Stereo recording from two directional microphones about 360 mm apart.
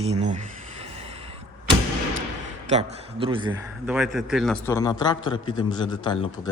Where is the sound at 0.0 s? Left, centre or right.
Centre.